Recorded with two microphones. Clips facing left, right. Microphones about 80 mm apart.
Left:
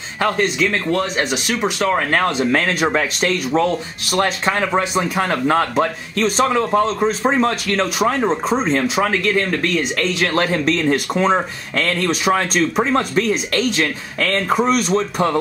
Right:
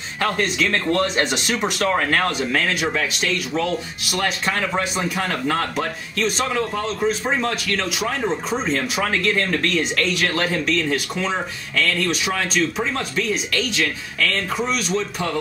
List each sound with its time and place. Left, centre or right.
0.2 s speech: left
0.7 s speech: centre
2.0 s speech: left
2.5 s speech: left
10.3 s speech: left